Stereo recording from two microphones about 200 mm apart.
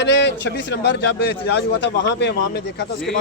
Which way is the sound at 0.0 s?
60° left (ahead or behind).